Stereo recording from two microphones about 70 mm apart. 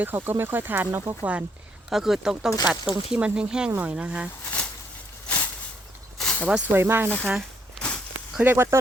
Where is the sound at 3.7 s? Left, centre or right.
Right.